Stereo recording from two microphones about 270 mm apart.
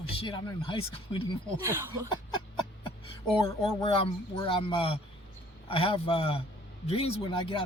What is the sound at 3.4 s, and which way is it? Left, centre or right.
Speech, centre.